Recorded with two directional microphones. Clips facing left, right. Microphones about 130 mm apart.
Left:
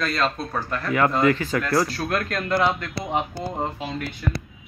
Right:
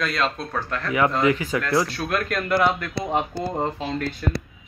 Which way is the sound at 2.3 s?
20° left (ahead or behind).